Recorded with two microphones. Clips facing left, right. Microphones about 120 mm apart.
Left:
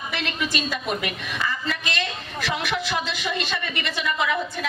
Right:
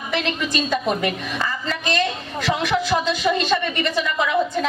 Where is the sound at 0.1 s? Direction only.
35° right (ahead or behind).